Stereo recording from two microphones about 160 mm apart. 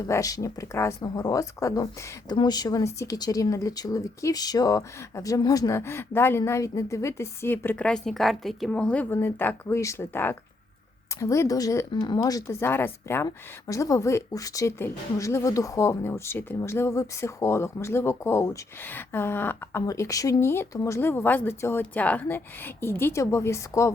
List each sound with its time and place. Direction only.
0.0 s speech: 20° left (ahead or behind)